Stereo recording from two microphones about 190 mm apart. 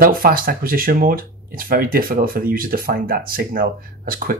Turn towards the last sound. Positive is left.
turn(degrees=-50)  # may be behind; listen again after turning